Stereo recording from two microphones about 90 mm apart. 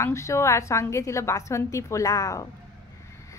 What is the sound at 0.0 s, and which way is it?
A woman's voice, 35° left (ahead or behind).